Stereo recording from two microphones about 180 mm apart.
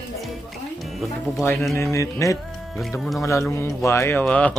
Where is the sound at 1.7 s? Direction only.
15° left (ahead or behind).